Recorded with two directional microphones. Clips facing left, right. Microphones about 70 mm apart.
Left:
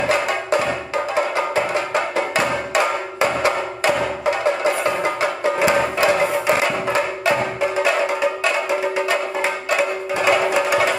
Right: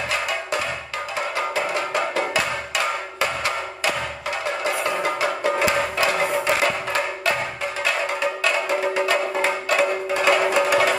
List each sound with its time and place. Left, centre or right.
0.1 s music: left
8.9 s music: centre